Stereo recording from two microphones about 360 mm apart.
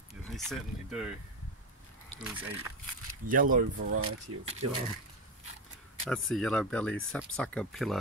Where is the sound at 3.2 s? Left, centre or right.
Right.